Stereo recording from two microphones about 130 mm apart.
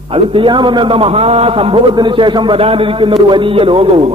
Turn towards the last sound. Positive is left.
turn(degrees=-45)  # may be behind; listen again after turning